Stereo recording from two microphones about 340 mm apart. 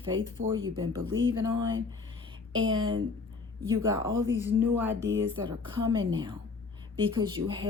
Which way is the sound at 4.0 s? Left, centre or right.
Right.